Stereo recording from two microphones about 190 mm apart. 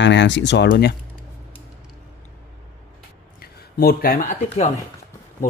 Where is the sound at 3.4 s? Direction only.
55° left (ahead or behind).